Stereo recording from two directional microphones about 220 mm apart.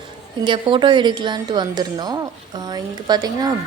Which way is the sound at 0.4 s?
20° right (ahead or behind).